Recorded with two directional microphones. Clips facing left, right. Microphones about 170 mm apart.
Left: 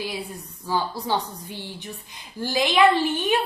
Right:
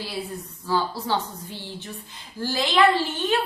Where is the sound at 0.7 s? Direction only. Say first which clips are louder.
Even; 15° left (ahead or behind).